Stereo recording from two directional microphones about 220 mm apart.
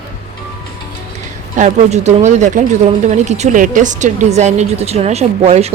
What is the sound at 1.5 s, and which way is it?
Speech, 30° right (ahead or behind).